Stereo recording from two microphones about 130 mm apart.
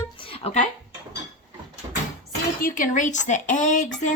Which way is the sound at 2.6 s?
90° left.